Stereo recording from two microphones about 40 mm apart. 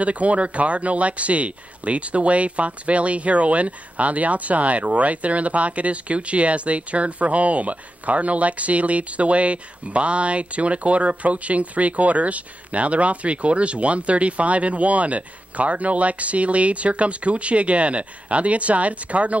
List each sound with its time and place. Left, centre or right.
0.0 s speech: right